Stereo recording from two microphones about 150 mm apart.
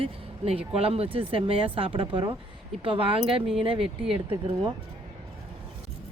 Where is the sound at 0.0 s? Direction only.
40° right (ahead or behind).